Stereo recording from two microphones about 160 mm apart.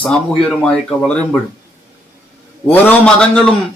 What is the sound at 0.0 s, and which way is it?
Speech, 5° left (ahead or behind).